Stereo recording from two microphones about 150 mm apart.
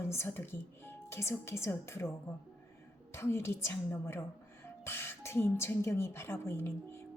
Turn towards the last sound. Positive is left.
turn(degrees=15)  # may be behind; listen again after turning